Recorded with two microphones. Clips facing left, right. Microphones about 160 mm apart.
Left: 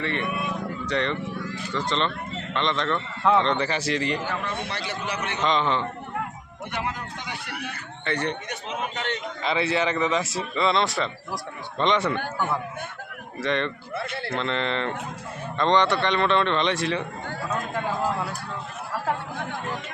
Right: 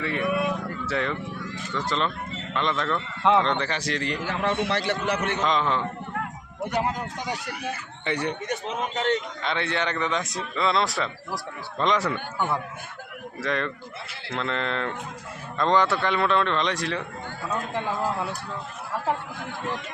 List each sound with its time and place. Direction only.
0.0 s a man's voice: 5° right (ahead or behind)
4.2 s a man's voice: 75° right (ahead or behind)
4.8 s a man's voice: 60° right (ahead or behind)
5.4 s speech: centre (ahead or behind)
6.7 s speech: 40° right (ahead or behind)
8.0 s a man's voice: 10° right (ahead or behind)
9.4 s speech: 5° left (ahead or behind)
13.4 s speech: centre (ahead or behind)